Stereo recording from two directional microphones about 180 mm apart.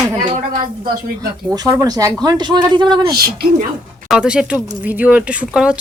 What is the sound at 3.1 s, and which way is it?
Speech, 55° right (ahead or behind).